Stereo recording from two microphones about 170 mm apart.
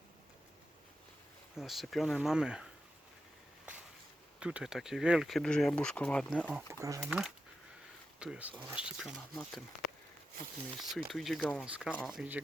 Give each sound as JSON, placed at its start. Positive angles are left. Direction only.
{"t": 1.5, "sound": "speech", "side_deg": 0}
{"t": 4.4, "sound": "speech", "side_deg": -5}
{"t": 6.5, "sound": "speech", "side_deg": -5}
{"t": 6.7, "sound": "speech", "side_deg": -20}
{"t": 7.0, "sound": "speech", "side_deg": 0}
{"t": 10.8, "sound": "speech", "side_deg": 0}